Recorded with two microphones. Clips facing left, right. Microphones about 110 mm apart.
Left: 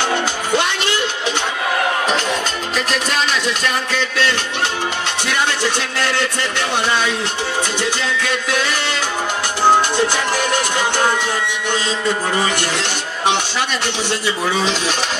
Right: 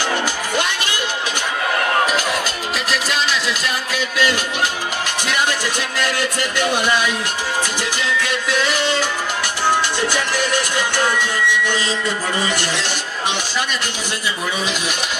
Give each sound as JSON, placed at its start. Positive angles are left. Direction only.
{"t": 3.6, "sound": "speech", "side_deg": -10}
{"t": 5.6, "sound": "music", "side_deg": 25}
{"t": 9.7, "sound": "music", "side_deg": 25}